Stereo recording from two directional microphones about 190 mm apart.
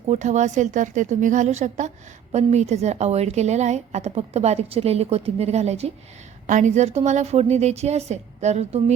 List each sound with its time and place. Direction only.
0.1 s a woman's voice: 40° right (ahead or behind)